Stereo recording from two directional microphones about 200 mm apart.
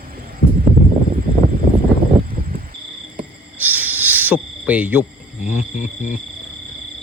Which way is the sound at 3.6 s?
10° right (ahead or behind).